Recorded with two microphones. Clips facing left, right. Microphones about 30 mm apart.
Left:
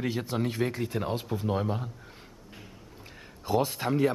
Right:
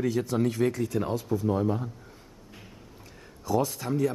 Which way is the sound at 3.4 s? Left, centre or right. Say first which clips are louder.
Even; left.